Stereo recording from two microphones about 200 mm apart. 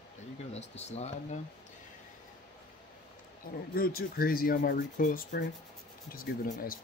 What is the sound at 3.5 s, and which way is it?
Speech, 50° left (ahead or behind).